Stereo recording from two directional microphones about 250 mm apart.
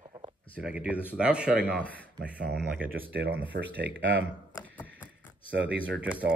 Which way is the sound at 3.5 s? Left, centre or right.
Right.